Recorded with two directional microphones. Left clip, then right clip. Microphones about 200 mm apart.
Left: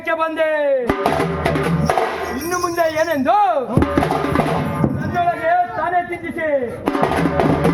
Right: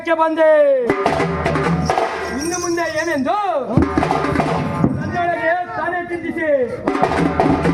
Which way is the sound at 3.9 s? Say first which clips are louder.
Even; 45° left (ahead or behind).